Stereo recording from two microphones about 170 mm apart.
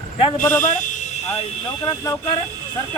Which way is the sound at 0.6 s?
50° left (ahead or behind).